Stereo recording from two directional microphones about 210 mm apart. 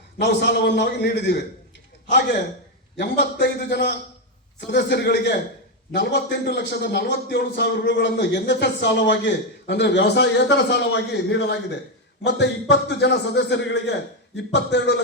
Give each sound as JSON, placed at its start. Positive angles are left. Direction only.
{"t": 0.2, "sound": "a man's voice", "side_deg": 55}